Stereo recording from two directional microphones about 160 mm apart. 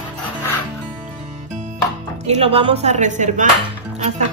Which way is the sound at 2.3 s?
35° right (ahead or behind).